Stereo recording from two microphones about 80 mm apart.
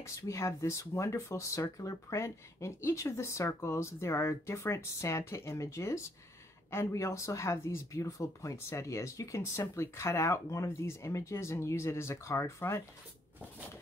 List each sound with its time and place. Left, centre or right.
0.0 s speech: left